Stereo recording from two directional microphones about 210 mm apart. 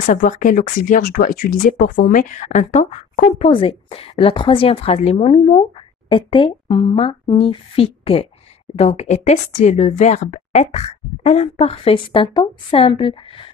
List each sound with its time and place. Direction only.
0.0 s a woman's voice: 40° left (ahead or behind)